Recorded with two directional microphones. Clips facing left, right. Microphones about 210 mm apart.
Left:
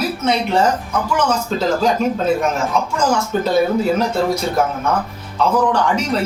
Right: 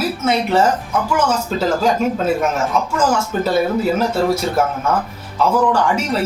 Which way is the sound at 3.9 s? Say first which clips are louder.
Right 1 dB; 5° right (ahead or behind).